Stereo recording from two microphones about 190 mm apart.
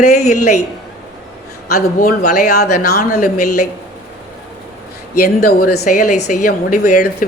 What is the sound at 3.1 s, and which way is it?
Speech, 40° left (ahead or behind).